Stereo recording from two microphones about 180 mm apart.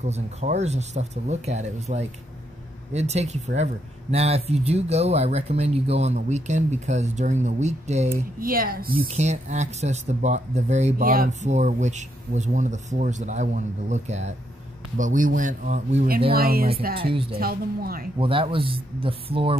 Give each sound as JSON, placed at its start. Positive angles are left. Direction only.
{"t": 0.0, "sound": "speech", "side_deg": -40}
{"t": 8.4, "sound": "speech", "side_deg": -55}
{"t": 9.1, "sound": "speech", "side_deg": -40}
{"t": 11.0, "sound": "speech", "side_deg": -55}
{"t": 16.3, "sound": "speech", "side_deg": -55}
{"t": 16.9, "sound": "speech", "side_deg": -30}
{"t": 17.4, "sound": "speech", "side_deg": -55}
{"t": 18.1, "sound": "speech", "side_deg": -30}